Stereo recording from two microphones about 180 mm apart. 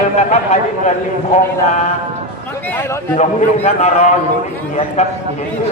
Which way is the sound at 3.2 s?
40° left (ahead or behind).